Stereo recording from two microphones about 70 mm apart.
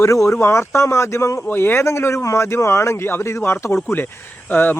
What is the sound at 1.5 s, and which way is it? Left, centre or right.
Speech, left.